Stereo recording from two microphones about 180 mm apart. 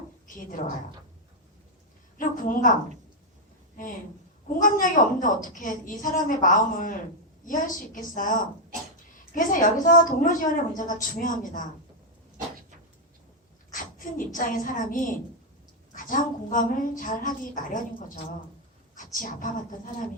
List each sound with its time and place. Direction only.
2.1 s a sound: 50° left (ahead or behind)
4.4 s a woman's voice: 45° left (ahead or behind)
9.3 s a woman's voice: 50° left (ahead or behind)
13.7 s a sound: 50° left (ahead or behind)
14.3 s a woman's voice: 50° left (ahead or behind)
18.9 s a woman's voice: 45° left (ahead or behind)